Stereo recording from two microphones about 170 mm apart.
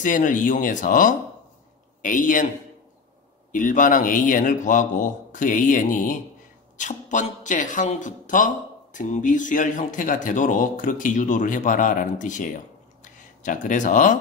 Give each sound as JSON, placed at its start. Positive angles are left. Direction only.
{"t": 0.0, "sound": "a man's voice", "side_deg": 50}
{"t": 3.5, "sound": "speech", "side_deg": 50}